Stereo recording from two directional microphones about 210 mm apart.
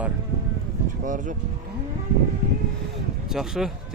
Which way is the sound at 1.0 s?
40° right (ahead or behind).